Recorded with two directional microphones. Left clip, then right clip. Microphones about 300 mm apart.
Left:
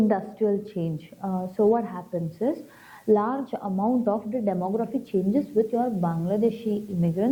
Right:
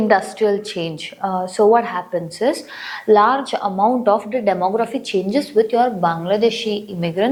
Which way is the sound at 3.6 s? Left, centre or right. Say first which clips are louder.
Right 10 dB; centre.